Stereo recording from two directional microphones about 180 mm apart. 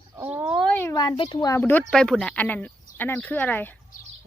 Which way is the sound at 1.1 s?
30° left (ahead or behind).